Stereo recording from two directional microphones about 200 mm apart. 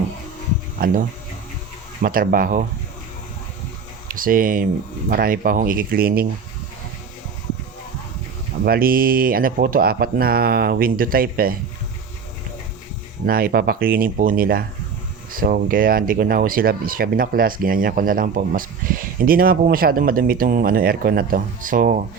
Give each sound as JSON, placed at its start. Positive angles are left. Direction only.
{"t": 2.0, "sound": "speech", "side_deg": -45}
{"t": 4.1, "sound": "speech", "side_deg": -45}
{"t": 8.6, "sound": "speech", "side_deg": -45}
{"t": 13.2, "sound": "speech", "side_deg": -45}